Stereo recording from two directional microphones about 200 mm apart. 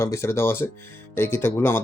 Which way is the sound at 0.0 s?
15° left (ahead or behind).